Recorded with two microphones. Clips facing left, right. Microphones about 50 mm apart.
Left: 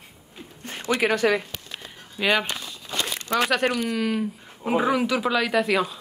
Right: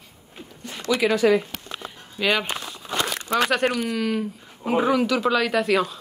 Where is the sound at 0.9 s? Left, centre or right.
Left.